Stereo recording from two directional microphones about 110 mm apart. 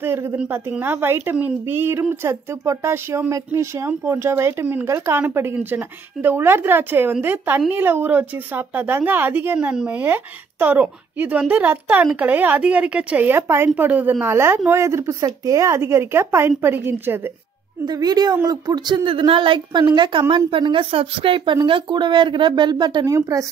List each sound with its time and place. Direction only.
0.0 s a woman's voice: 20° right (ahead or behind)
17.8 s a woman's voice: 40° right (ahead or behind)
19.0 s a woman's voice: 50° right (ahead or behind)